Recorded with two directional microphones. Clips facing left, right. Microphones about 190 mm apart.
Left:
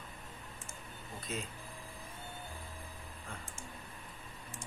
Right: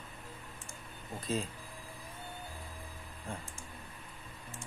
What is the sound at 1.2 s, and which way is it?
Speech, 30° right (ahead or behind).